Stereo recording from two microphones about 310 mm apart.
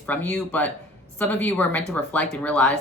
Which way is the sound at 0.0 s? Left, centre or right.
Centre.